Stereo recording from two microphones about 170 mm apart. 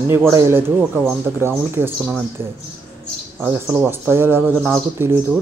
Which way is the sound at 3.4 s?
5° right (ahead or behind).